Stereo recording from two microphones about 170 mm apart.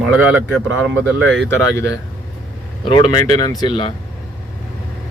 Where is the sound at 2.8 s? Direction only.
25° left (ahead or behind).